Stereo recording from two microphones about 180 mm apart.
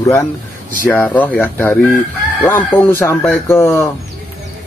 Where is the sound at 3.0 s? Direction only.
15° left (ahead or behind).